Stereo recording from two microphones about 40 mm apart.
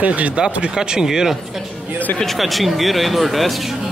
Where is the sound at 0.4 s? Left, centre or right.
Centre.